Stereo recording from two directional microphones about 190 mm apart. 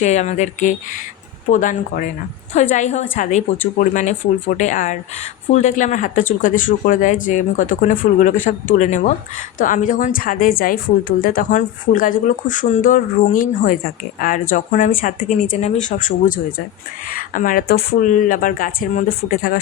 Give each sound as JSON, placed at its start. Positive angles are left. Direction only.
{"t": 0.0, "sound": "a woman's voice", "side_deg": 40}